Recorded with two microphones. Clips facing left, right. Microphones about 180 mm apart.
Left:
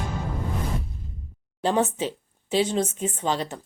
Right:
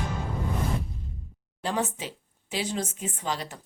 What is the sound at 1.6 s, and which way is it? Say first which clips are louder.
A woman's voice: left 6 dB; 25° left (ahead or behind).